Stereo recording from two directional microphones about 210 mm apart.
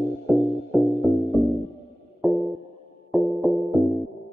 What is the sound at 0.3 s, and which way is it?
Music, centre (ahead or behind).